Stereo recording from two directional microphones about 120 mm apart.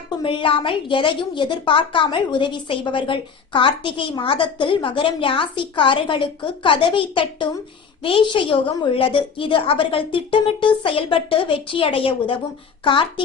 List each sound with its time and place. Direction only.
0.2 s a woman's voice: 45° left (ahead or behind)